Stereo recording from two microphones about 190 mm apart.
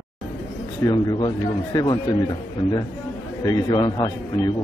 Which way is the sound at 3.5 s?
20° left (ahead or behind).